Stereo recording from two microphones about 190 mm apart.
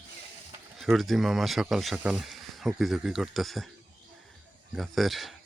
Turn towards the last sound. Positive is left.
turn(degrees=0)  # may be behind; listen again after turning